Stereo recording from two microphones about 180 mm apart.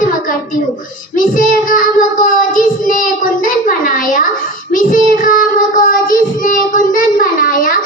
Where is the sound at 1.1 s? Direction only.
50° left (ahead or behind).